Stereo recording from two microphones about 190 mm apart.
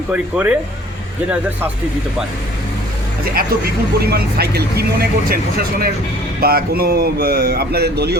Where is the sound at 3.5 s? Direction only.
55° right (ahead or behind).